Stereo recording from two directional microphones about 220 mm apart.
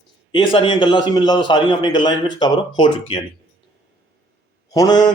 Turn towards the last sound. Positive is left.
turn(degrees=20)  # may be behind; listen again after turning